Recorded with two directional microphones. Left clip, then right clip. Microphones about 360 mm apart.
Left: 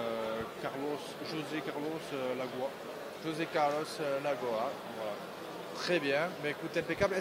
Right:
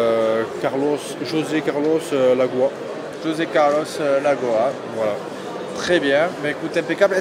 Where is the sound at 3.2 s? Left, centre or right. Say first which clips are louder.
Right 14 dB; left.